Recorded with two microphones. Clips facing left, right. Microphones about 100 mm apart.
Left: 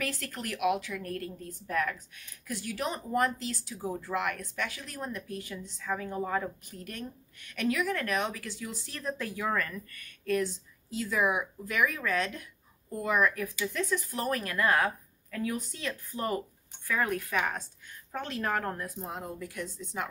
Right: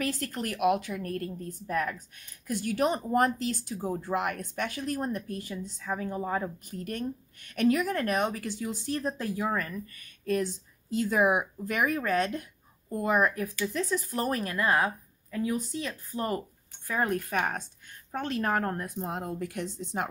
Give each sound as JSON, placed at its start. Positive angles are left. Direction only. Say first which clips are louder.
{"t": 0.0, "sound": "a woman's voice", "louder": "right 4 dB", "side_deg": -40}
{"t": 2.0, "sound": "a woman's voice", "louder": "right 1 dB", "side_deg": -50}
{"t": 4.0, "sound": "a woman's voice", "louder": "right 2 dB", "side_deg": -45}
{"t": 5.9, "sound": "a woman's voice", "louder": "even", "side_deg": -15}
{"t": 6.2, "sound": "speech", "louder": "even", "side_deg": -25}
{"t": 6.7, "sound": "a woman's voice", "louder": "right 7 dB", "side_deg": -45}
{"t": 9.5, "sound": "speech", "louder": "even", "side_deg": -20}
{"t": 10.9, "sound": "a woman's voice", "louder": "right 4 dB", "side_deg": -50}
{"t": 12.9, "sound": "a woman's voice", "louder": "right 2 dB", "side_deg": -40}
{"t": 14.2, "sound": "speech", "louder": "even", "side_deg": -25}
{"t": 17.1, "sound": "a woman's voice", "louder": "right 2 dB", "side_deg": -45}
{"t": 19.6, "sound": "speech", "louder": "right 3 dB", "side_deg": -70}